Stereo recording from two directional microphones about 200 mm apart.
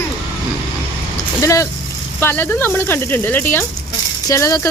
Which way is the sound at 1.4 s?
15° left (ahead or behind).